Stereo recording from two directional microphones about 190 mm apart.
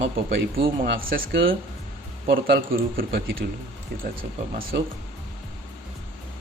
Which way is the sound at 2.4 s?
50° right (ahead or behind).